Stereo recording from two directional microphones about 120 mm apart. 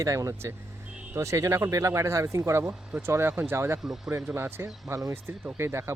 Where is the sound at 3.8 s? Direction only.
5° right (ahead or behind).